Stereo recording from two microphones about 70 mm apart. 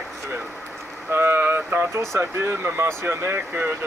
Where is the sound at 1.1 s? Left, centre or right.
Right.